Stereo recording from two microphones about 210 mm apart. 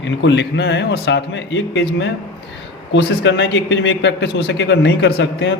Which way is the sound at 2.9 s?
60° left (ahead or behind).